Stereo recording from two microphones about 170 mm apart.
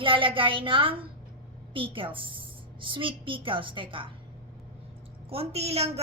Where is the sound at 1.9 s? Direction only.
30° right (ahead or behind).